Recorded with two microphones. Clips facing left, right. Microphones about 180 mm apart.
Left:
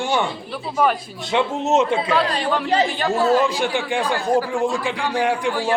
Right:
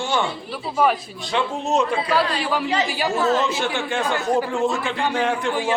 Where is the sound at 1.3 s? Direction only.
20° left (ahead or behind).